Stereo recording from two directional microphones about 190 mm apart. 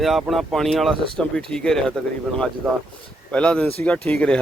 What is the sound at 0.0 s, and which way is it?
Speech, centre (ahead or behind).